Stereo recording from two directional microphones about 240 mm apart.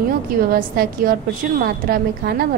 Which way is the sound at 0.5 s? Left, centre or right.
Right.